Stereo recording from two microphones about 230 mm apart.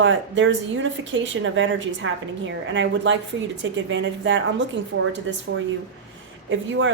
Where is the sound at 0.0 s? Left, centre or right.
Right.